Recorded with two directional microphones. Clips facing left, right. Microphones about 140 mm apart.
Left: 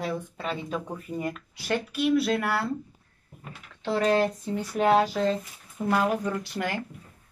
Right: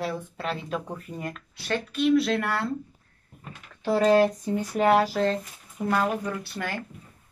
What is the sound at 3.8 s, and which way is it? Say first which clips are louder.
Speech: right 4 dB; 5° right (ahead or behind).